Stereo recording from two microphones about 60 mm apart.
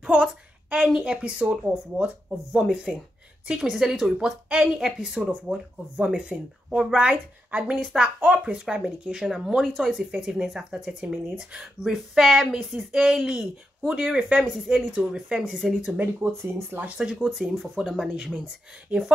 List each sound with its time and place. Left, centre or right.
0.0 s a sound: centre
0.8 s speech: centre
2.5 s speech: centre; by 14.4 s right
14.4 s speech: centre
16.2 s speech: right
16.8 s speech: centre